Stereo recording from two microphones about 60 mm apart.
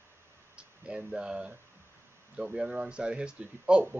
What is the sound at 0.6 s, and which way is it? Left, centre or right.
Speech, centre.